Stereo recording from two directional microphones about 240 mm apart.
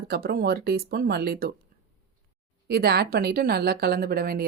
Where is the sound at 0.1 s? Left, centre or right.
Right.